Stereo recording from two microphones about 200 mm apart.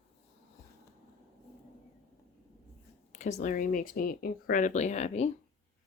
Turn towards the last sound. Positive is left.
turn(degrees=35)  # may be behind; listen again after turning